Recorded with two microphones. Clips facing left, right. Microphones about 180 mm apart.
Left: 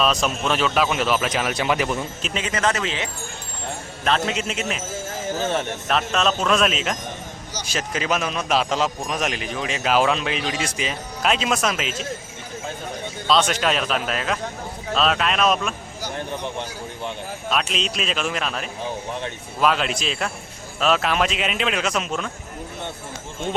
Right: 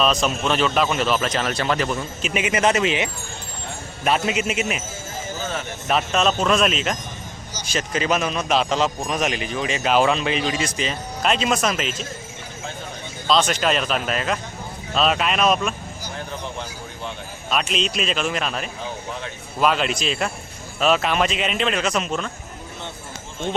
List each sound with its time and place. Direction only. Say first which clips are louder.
0.0 s speech: right 1 dB; centre (ahead or behind)
2.2 s speech: right 5 dB; 10° right (ahead or behind)
5.9 s speech: right 2 dB; 5° right (ahead or behind)
13.2 s speech: right 1 dB; centre (ahead or behind)
17.5 s speech: right 2 dB; centre (ahead or behind)